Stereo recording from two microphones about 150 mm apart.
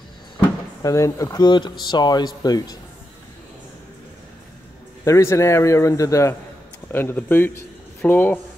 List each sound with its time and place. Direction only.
0.8 s speech: 20° left (ahead or behind)
5.0 s a man's voice: 20° left (ahead or behind)